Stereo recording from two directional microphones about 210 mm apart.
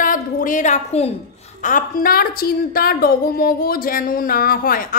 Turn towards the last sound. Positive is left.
turn(degrees=45)  # may be behind; listen again after turning